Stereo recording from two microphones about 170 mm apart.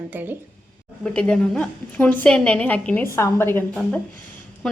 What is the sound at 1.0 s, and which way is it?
A woman's voice, 5° left (ahead or behind).